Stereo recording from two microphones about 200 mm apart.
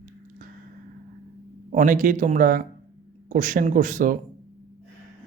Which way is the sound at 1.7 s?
40° right (ahead or behind).